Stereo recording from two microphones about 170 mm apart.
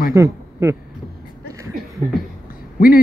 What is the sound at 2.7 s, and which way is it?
Speech, 55° left (ahead or behind).